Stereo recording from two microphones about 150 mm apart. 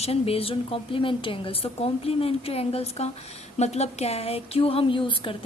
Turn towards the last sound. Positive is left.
turn(degrees=35)  # may be behind; listen again after turning